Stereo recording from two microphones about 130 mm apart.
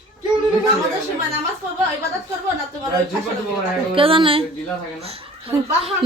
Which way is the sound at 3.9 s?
45° right (ahead or behind).